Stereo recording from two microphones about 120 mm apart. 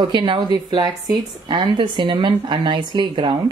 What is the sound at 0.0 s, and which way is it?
Speech, 45° right (ahead or behind).